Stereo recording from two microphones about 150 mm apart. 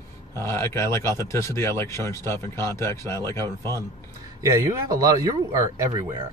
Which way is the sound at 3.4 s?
25° right (ahead or behind).